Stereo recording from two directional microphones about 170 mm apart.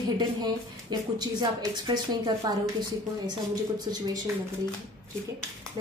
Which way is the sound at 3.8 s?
25° right (ahead or behind).